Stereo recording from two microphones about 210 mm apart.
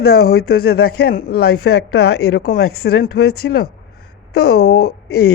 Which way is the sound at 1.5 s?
90° left.